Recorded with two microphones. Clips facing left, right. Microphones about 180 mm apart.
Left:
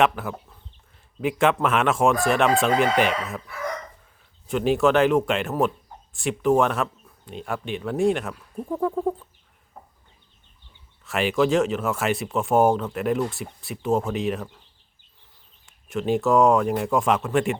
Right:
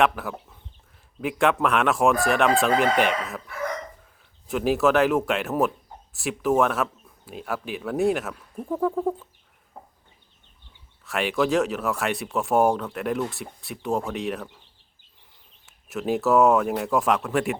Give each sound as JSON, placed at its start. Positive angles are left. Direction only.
{"t": 0.0, "sound": "speech", "side_deg": 0}
{"t": 4.4, "sound": "speech", "side_deg": 0}
{"t": 11.0, "sound": "speech", "side_deg": 0}
{"t": 15.6, "sound": "speech", "side_deg": -5}